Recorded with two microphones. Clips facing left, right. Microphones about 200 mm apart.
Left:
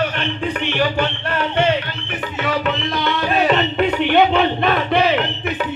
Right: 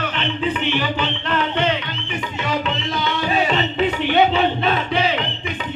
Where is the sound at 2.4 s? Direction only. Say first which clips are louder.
Left 3 dB; 55° left (ahead or behind).